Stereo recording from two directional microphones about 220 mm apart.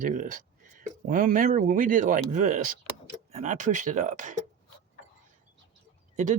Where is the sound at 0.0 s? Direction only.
35° right (ahead or behind).